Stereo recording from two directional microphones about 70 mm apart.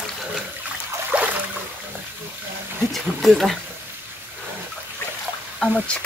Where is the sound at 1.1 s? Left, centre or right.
Right.